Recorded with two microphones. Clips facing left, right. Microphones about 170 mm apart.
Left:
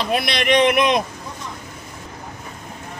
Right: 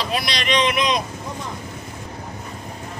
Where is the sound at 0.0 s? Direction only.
55° left (ahead or behind).